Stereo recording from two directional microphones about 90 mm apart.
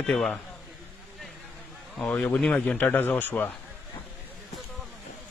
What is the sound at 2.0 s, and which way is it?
Speech, 15° left (ahead or behind).